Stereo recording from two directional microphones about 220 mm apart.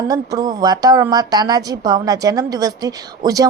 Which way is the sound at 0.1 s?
15° right (ahead or behind).